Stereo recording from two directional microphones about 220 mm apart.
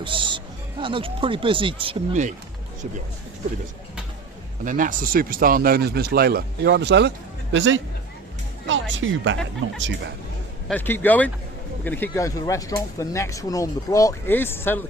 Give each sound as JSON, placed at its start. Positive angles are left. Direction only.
{"t": 0.0, "sound": "speech", "side_deg": -20}
{"t": 4.6, "sound": "a man's voice", "side_deg": -35}
{"t": 10.7, "sound": "speech", "side_deg": 10}